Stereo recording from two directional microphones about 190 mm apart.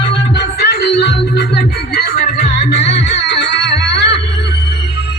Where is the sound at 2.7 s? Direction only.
70° left (ahead or behind).